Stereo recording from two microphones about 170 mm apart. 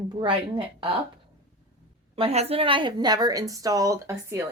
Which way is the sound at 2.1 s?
35° right (ahead or behind).